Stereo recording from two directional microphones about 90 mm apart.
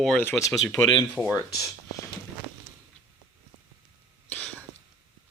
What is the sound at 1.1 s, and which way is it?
Speech, 15° right (ahead or behind).